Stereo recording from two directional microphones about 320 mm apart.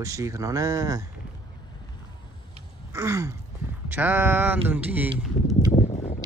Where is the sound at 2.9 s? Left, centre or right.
Centre.